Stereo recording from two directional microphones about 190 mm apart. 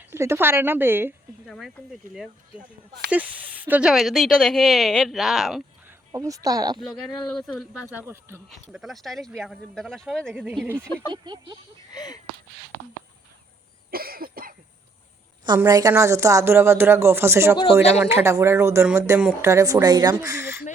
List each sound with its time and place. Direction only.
0.0 s a woman's voice: 15° right (ahead or behind)
1.5 s speech: centre (ahead or behind)
6.1 s speech: 15° right (ahead or behind)
6.7 s speech: centre (ahead or behind)
7.8 s a woman's voice: 10° right (ahead or behind)
8.7 s speech: centre (ahead or behind)
11.1 s speech: 25° right (ahead or behind)
11.9 s a sound: 20° left (ahead or behind)
13.9 s cough: 50° right (ahead or behind)
15.5 s a woman's voice: 20° right (ahead or behind)